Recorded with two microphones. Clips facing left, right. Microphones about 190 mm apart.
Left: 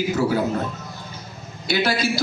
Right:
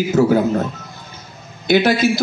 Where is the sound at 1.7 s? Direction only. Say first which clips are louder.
Right 7 dB; 50° right (ahead or behind).